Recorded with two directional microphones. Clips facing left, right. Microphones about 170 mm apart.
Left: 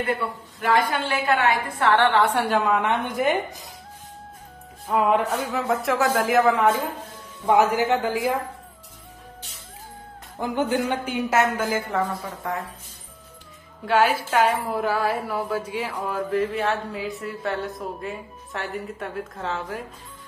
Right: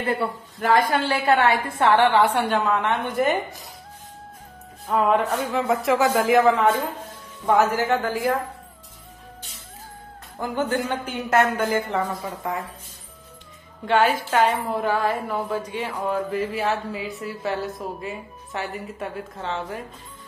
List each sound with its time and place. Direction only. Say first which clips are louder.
0.6 s a woman's voice: right 2 dB; 40° right (ahead or behind)
2.1 s a woman's voice: right 1 dB; 5° left (ahead or behind)
4.8 s speech: even; 5° left (ahead or behind)
7.4 s a woman's voice: left 1 dB; 15° left (ahead or behind)
10.4 s a woman's voice: left 1 dB; 15° left (ahead or behind); by 12.6 s 5° right (ahead or behind)
13.8 s a woman's voice: even; 5° left (ahead or behind)